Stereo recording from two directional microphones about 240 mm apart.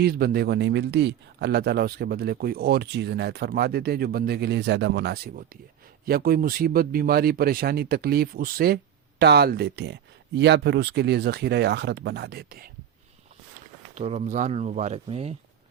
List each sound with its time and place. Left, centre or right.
0.0 s speech: right
13.9 s speech: right